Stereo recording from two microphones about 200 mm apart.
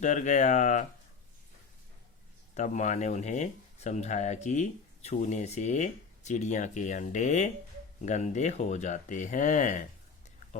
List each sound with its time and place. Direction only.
0.0 s speech: 35° left (ahead or behind)
2.6 s speech: 35° left (ahead or behind)